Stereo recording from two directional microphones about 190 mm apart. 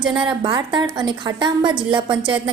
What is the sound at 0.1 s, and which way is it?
A woman's voice, 25° right (ahead or behind).